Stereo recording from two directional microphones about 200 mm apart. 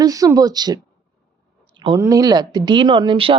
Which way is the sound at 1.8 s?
20° right (ahead or behind).